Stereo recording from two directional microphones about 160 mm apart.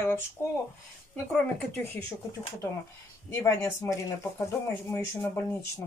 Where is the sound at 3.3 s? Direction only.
15° left (ahead or behind).